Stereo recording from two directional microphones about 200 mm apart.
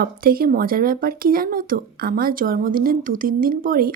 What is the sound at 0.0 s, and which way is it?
Speech, 45° right (ahead or behind).